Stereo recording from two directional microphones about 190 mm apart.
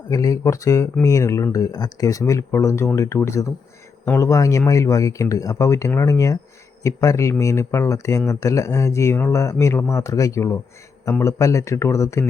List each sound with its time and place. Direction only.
0.1 s speech: 15° left (ahead or behind)